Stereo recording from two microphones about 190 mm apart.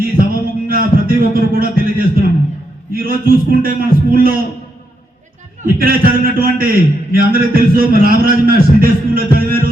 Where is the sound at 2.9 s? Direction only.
50° right (ahead or behind).